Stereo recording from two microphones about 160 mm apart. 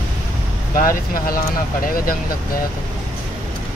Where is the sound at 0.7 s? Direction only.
60° left (ahead or behind).